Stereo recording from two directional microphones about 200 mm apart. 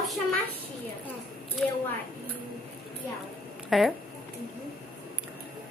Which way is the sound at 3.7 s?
Centre (ahead or behind).